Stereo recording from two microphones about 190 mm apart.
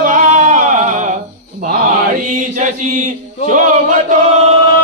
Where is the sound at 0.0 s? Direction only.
40° right (ahead or behind).